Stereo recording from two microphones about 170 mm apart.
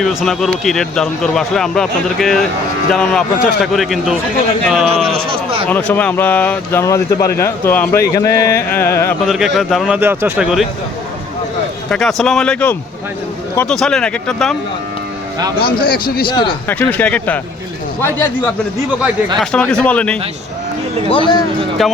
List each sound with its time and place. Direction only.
0.0 s speech: centre (ahead or behind)
5.6 s speech: 10° left (ahead or behind)
9.2 s speech: centre (ahead or behind)
10.0 s speech: 15° right (ahead or behind)
11.9 s speech: 5° left (ahead or behind)
15.8 s a man's voice: 60° left (ahead or behind)
16.2 s speech: 30° left (ahead or behind)
16.6 s speech: 10° left (ahead or behind)
19.4 s speech: 5° left (ahead or behind)
21.1 s speech: 30° left (ahead or behind)
21.8 s speech: centre (ahead or behind)